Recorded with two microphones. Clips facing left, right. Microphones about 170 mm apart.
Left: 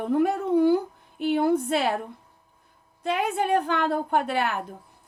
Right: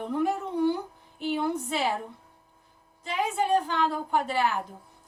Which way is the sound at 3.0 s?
60° left (ahead or behind).